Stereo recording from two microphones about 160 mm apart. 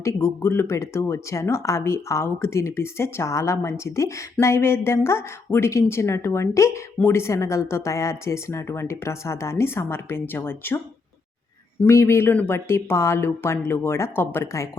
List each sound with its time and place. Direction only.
0.0 s speech: 15° left (ahead or behind)
11.8 s speech: 15° left (ahead or behind)